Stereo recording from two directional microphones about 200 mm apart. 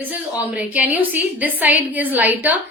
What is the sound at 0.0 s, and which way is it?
A woman's voice, 10° right (ahead or behind).